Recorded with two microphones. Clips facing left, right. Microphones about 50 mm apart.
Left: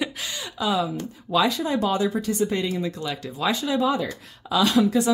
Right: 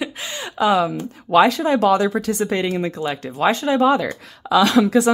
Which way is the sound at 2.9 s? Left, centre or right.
Right.